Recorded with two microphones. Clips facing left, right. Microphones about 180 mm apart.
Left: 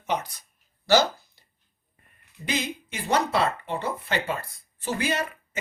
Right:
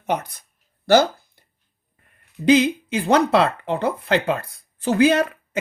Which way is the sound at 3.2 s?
80° right.